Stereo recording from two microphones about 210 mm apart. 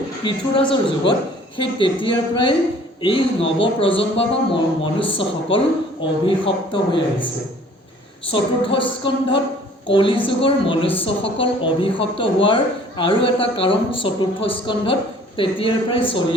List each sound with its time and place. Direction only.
0.3 s speech: 25° left (ahead or behind)
8.3 s speech: 25° left (ahead or behind)